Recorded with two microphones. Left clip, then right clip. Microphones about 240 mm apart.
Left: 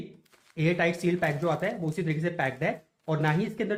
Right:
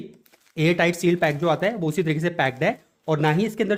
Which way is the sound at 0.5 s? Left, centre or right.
Right.